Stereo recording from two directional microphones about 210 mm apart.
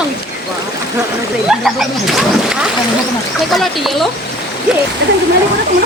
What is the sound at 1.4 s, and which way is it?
Speech, centre (ahead or behind).